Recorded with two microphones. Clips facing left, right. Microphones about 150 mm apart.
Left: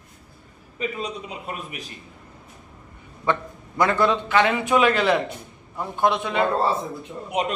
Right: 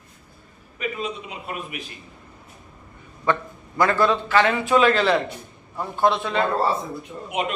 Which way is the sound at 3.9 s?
20° left (ahead or behind).